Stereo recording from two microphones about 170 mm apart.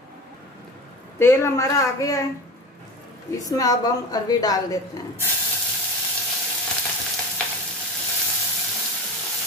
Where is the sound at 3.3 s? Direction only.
20° left (ahead or behind).